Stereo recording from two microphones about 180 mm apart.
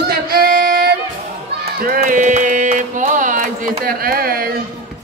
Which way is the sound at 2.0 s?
45° right (ahead or behind).